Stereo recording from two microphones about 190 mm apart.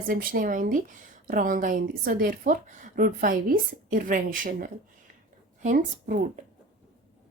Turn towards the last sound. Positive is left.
turn(degrees=-45)  # may be behind; listen again after turning